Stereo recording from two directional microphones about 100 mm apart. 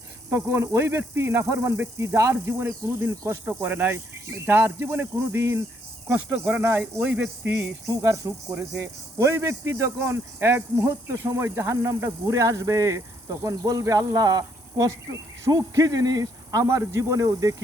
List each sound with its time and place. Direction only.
0.3 s speech: 25° right (ahead or behind)
7.0 s speech: 10° right (ahead or behind)
7.9 s speech: 30° right (ahead or behind)